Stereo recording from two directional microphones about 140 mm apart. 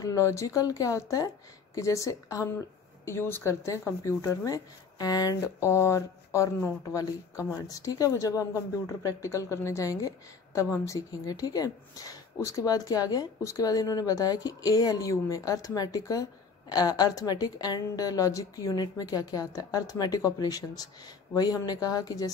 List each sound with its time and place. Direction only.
0.0 s speech: 20° left (ahead or behind)